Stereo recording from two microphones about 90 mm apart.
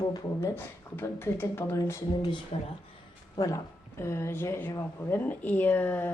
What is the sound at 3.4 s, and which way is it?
Speech, 40° left (ahead or behind).